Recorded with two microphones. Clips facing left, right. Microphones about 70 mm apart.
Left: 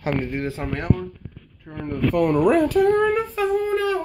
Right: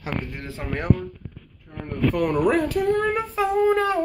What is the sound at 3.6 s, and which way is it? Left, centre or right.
Speech, right.